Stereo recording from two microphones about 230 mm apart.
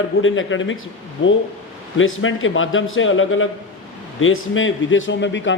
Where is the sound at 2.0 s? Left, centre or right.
Left.